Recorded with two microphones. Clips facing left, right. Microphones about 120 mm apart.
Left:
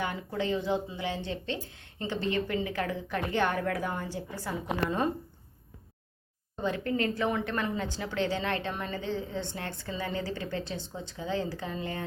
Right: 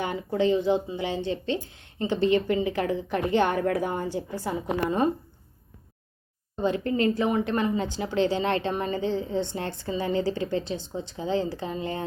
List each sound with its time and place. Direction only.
0.0 s a woman's voice: 25° right (ahead or behind)
6.6 s a woman's voice: 25° right (ahead or behind)